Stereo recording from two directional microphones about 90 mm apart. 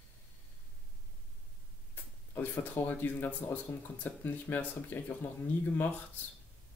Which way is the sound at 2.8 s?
20° left (ahead or behind).